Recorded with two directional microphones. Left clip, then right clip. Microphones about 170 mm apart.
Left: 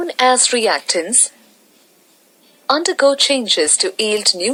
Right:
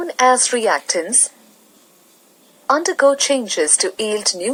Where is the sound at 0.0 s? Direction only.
20° left (ahead or behind).